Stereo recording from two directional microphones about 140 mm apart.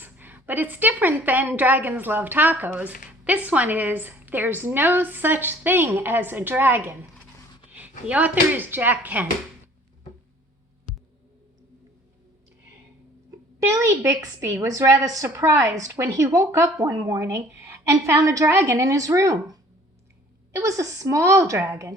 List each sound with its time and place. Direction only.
0.0 s a woman's voice: 15° right (ahead or behind)
13.6 s a woman's voice: 20° right (ahead or behind)